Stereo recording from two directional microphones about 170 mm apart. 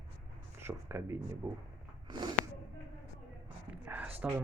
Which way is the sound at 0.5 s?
15° right (ahead or behind).